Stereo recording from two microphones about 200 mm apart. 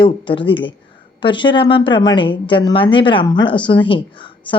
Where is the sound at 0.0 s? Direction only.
25° left (ahead or behind).